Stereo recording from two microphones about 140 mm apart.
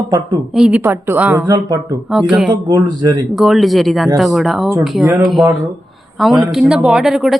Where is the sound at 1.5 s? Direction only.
25° right (ahead or behind).